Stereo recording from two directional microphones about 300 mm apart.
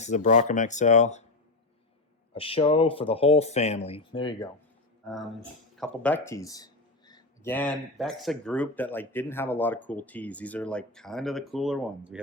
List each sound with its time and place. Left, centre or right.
0.0 s speech: left
2.3 s speech: centre
5.0 s speech: centre